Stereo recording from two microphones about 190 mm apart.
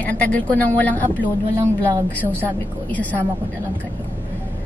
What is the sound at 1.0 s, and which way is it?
Speech, 15° right (ahead or behind).